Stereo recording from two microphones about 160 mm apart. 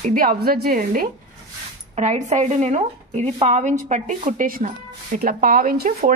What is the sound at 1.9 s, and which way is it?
A woman's voice, 45° right (ahead or behind).